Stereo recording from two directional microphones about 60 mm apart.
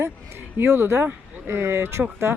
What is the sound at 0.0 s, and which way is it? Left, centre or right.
Speech, right.